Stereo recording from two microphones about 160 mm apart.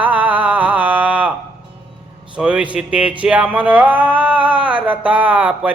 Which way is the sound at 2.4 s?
5° right (ahead or behind).